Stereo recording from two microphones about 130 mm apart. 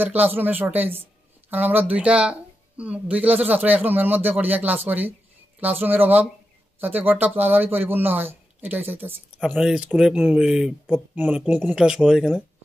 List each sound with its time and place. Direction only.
0.0 s speech: 15° right (ahead or behind)
9.4 s speech: 5° right (ahead or behind)